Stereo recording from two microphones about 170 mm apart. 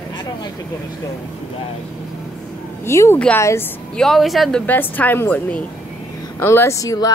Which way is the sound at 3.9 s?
Centre (ahead or behind).